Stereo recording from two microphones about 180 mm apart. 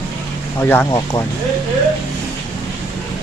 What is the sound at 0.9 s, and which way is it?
Speech, 20° left (ahead or behind).